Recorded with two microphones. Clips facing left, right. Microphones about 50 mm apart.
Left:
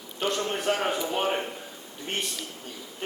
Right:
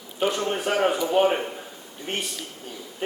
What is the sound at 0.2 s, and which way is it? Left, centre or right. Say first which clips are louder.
A man's voice: right 4 dB; centre.